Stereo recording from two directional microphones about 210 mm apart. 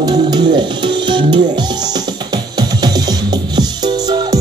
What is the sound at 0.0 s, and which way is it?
Music, 20° right (ahead or behind).